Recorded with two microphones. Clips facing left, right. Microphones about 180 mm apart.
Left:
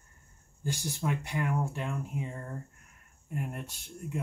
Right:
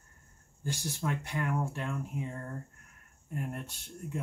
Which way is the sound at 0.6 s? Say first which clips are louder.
Left 2 dB; 15° left (ahead or behind).